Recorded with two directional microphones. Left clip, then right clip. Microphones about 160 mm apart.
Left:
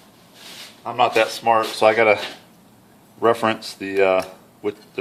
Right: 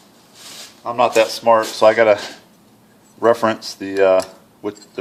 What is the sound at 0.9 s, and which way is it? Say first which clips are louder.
Speech: right 3 dB; 40° right (ahead or behind).